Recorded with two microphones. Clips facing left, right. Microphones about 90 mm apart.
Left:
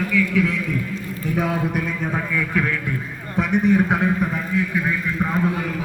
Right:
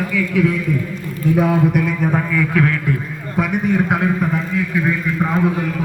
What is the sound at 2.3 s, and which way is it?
Speech, 5° left (ahead or behind).